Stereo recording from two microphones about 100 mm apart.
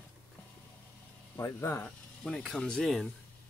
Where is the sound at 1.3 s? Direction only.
25° left (ahead or behind).